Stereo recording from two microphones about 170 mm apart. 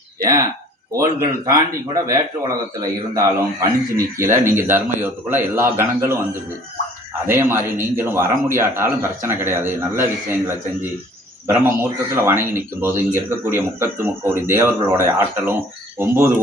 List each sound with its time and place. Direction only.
0.2 s a man's voice: 20° right (ahead or behind)
11.4 s a man's voice: 15° right (ahead or behind)